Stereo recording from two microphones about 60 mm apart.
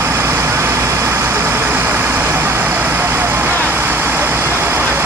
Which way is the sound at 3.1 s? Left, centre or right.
Right.